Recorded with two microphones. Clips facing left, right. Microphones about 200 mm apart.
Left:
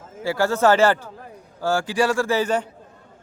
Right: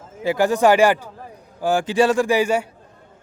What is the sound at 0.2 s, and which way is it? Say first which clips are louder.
A man's voice: right 3 dB; 15° right (ahead or behind).